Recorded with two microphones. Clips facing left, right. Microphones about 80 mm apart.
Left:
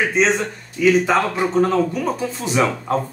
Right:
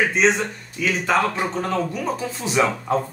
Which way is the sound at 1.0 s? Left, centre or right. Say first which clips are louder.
Left 2 dB; centre.